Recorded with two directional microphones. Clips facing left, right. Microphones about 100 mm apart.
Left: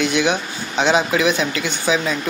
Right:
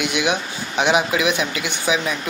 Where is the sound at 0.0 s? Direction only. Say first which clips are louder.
Left 3 dB; 15° right (ahead or behind).